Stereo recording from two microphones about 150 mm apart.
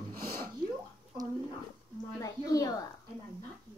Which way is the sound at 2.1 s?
20° left (ahead or behind).